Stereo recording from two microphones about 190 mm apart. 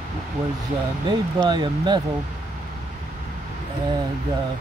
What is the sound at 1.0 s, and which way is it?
Speech, 25° right (ahead or behind).